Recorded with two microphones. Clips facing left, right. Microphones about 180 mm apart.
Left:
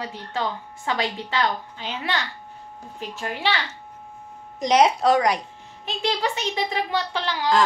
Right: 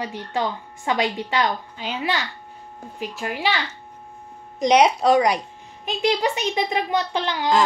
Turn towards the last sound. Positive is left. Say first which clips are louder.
# right 2 dB
turn(degrees=-20)  # may be behind; listen again after turning